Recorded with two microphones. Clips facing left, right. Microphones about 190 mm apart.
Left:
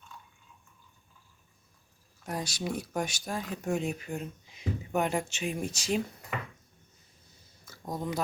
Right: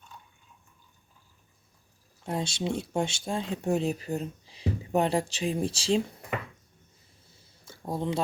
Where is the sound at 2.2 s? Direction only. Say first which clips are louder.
Right 4 dB; 25° right (ahead or behind).